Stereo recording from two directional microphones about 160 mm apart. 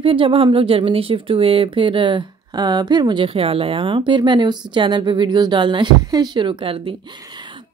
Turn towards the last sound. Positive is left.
turn(degrees=-35)  # may be behind; listen again after turning